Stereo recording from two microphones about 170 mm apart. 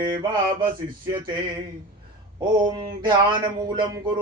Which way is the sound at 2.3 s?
25° right (ahead or behind).